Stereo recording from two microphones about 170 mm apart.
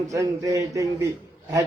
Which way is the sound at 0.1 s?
20° right (ahead or behind).